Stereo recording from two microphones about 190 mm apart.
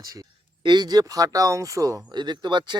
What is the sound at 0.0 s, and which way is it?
Speech, 20° right (ahead or behind).